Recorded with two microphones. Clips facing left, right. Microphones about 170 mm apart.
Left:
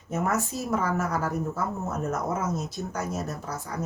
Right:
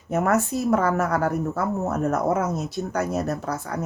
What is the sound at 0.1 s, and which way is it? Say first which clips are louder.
A woman's voice: right 6 dB; 60° right (ahead or behind).